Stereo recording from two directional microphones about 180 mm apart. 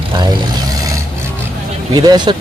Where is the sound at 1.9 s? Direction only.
25° right (ahead or behind).